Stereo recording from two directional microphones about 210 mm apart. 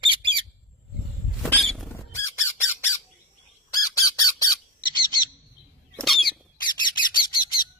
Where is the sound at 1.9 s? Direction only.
10° left (ahead or behind).